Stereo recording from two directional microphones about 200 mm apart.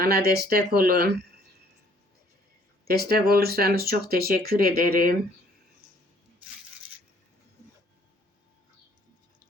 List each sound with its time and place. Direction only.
0.0 s speech: 50° right (ahead or behind)
2.8 s speech: 50° right (ahead or behind)